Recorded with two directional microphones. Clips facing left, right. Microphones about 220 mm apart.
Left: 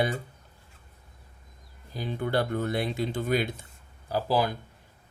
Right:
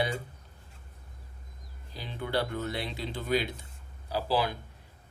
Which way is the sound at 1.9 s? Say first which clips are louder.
Left 4 dB; 50° left (ahead or behind).